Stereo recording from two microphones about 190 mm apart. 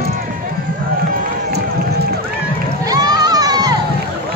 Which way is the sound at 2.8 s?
20° right (ahead or behind).